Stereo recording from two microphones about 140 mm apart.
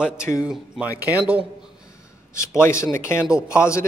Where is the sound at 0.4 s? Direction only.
10° right (ahead or behind).